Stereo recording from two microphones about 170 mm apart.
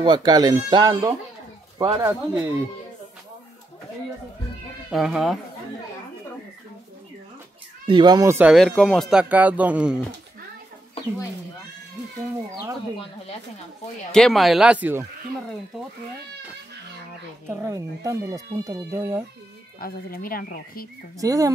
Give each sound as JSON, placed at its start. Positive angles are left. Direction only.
{"t": 0.0, "sound": "speech", "side_deg": -25}
{"t": 4.9, "sound": "speech", "side_deg": -5}
{"t": 7.8, "sound": "speech", "side_deg": -25}
{"t": 8.5, "sound": "speech", "side_deg": 0}
{"t": 14.1, "sound": "speech", "side_deg": 0}
{"t": 17.5, "sound": "speech", "side_deg": -15}
{"t": 19.8, "sound": "speech", "side_deg": 60}
{"t": 21.2, "sound": "speech", "side_deg": -20}